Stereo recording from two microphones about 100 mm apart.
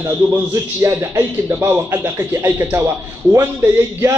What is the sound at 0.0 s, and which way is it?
A man's voice, 25° right (ahead or behind).